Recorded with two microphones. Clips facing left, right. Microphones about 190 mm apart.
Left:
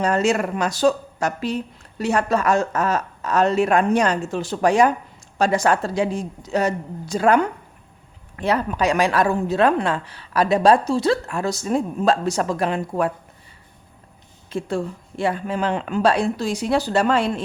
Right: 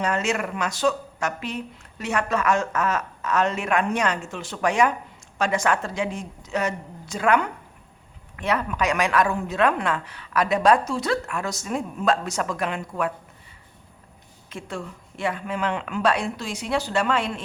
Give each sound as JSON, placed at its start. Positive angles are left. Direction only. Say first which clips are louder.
{"t": 0.0, "sound": "a woman's voice", "louder": "left 5 dB", "side_deg": 35}
{"t": 14.5, "sound": "a woman's voice", "louder": "left 9 dB", "side_deg": 35}